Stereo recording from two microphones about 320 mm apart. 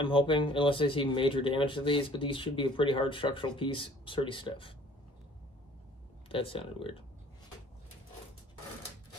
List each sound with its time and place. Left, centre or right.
0.0 s speech: centre
6.2 s speech: centre